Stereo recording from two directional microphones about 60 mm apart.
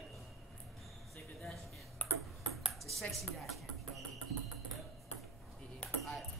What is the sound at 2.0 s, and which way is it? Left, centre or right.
Ping, left.